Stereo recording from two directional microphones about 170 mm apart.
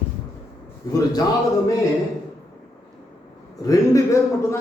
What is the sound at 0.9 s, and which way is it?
Speech, 20° left (ahead or behind).